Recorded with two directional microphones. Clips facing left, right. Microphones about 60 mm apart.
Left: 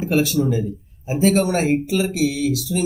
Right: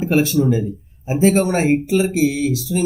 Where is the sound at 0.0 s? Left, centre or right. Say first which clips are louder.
Right 3 dB; right.